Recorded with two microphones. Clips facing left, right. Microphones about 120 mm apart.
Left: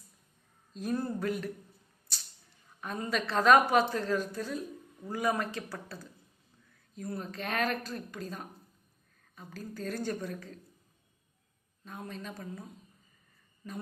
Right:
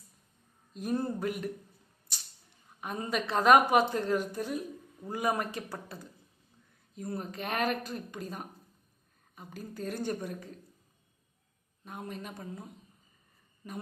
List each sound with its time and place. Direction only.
0.7 s a woman's voice: 15° right (ahead or behind)
2.8 s a woman's voice: 15° right (ahead or behind)
11.9 s a woman's voice: 15° right (ahead or behind)